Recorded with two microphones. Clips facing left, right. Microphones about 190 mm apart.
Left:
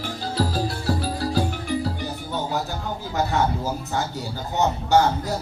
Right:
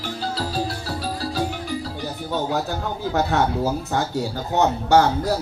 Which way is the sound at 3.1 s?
65° right (ahead or behind).